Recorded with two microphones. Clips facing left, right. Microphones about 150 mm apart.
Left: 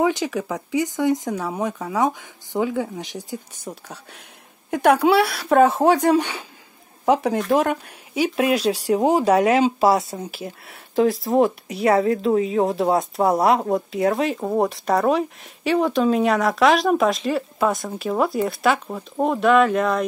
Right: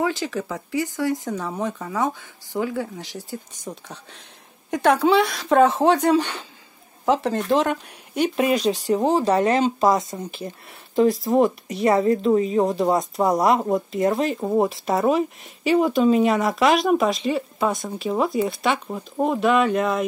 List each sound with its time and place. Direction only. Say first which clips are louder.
0.0 s speech: left 3 dB; 15° left (ahead or behind); by 20.1 s centre (ahead or behind)